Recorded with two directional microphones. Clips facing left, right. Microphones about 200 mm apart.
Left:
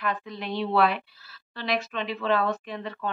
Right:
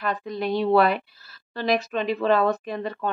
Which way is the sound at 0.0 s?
40° right (ahead or behind).